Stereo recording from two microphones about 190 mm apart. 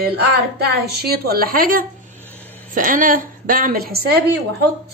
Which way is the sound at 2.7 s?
45° right (ahead or behind).